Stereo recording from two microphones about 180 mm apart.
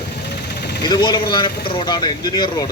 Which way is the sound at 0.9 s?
25° left (ahead or behind).